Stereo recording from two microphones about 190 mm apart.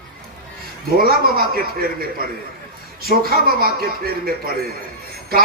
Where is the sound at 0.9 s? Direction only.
50° right (ahead or behind).